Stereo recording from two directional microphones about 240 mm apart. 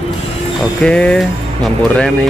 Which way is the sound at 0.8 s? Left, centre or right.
Centre.